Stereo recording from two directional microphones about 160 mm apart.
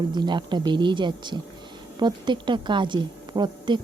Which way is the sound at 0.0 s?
30° right (ahead or behind).